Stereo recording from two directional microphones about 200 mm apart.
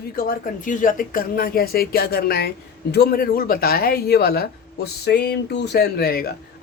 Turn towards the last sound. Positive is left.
turn(degrees=50)  # may be behind; listen again after turning